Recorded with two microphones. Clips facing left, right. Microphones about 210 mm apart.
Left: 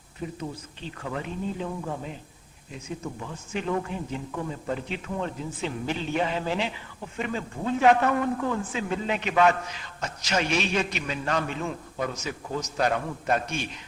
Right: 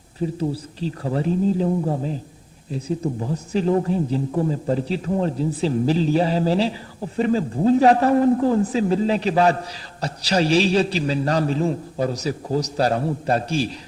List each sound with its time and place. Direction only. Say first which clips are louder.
0.2 s a man's voice: right 10 dB; 35° right (ahead or behind)